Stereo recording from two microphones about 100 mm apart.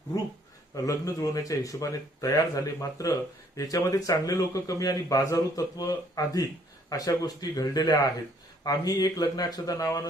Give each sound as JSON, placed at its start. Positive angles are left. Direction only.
{"t": 0.9, "sound": "speech", "side_deg": 35}